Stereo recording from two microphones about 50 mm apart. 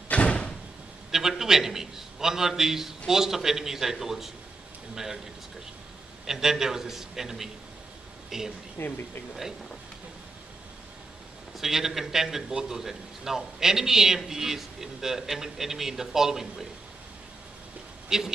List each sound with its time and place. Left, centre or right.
0.1 s door: left
1.1 s a man's voice: centre
6.2 s a man's voice: centre
8.7 s speech: left
11.5 s a man's voice: centre
18.0 s speech: centre